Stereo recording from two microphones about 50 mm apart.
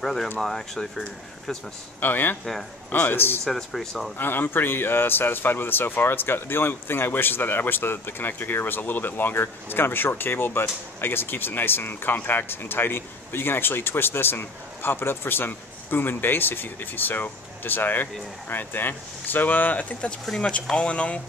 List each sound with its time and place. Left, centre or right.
0.0 s speech: centre
2.0 s speech: left
3.4 s speech: centre
4.2 s speech: left
20.2 s speech: centre
20.7 s speech: left